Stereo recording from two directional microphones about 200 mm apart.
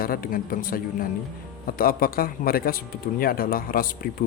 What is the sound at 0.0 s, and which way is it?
Speech, 45° left (ahead or behind).